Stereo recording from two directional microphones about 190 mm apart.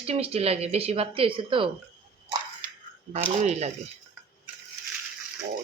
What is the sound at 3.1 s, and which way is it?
Speech, 35° right (ahead or behind).